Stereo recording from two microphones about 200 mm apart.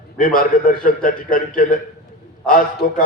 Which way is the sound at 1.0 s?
45° left (ahead or behind).